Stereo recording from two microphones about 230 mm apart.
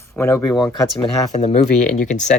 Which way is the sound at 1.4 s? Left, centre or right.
Left.